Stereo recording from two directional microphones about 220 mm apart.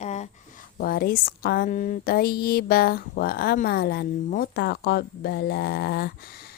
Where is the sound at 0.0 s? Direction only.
30° left (ahead or behind).